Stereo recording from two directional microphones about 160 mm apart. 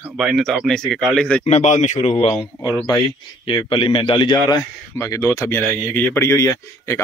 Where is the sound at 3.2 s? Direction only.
35° left (ahead or behind); by 7.0 s 15° left (ahead or behind).